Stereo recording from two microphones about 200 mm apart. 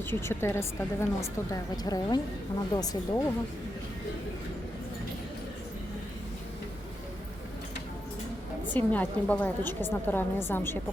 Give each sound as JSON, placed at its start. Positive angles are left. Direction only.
{"t": 0.1, "sound": "a woman's voice", "side_deg": 10}
{"t": 8.7, "sound": "a woman's voice", "side_deg": 10}